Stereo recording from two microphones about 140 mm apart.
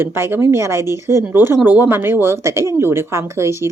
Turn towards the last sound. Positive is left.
turn(degrees=-20)  # may be behind; listen again after turning